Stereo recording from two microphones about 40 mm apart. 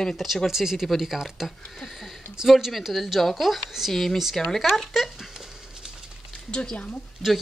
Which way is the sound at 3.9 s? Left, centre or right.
Centre.